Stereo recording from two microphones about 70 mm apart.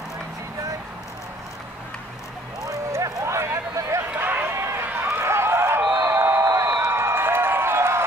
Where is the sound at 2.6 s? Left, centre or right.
Right.